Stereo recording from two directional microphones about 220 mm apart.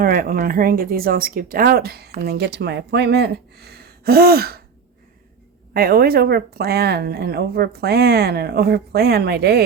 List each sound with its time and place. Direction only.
0.0 s speech: 40° right (ahead or behind)
5.7 s speech: 45° right (ahead or behind)